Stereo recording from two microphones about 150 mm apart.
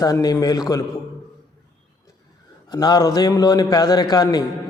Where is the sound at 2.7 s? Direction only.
25° left (ahead or behind).